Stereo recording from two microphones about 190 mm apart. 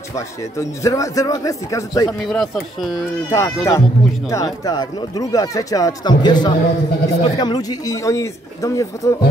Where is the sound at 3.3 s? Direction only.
15° left (ahead or behind).